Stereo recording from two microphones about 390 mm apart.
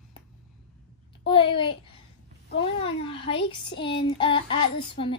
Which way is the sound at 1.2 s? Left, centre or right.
Centre.